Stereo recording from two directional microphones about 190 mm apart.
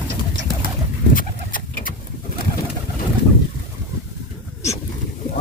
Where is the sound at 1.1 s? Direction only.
45° left (ahead or behind).